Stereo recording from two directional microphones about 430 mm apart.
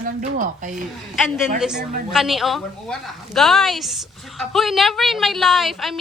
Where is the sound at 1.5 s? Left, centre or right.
Centre.